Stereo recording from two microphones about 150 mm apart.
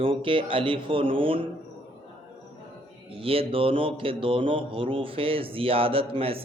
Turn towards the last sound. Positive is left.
turn(degrees=-40)  # may be behind; listen again after turning